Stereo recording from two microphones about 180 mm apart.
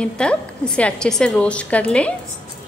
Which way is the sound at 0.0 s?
5° left (ahead or behind).